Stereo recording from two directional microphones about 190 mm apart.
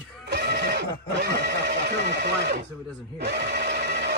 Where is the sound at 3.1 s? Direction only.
60° right (ahead or behind).